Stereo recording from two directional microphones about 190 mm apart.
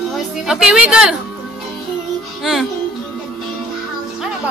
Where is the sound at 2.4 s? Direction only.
Centre (ahead or behind).